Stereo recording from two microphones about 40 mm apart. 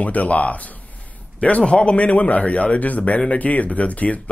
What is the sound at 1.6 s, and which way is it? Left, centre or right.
A man's voice, left.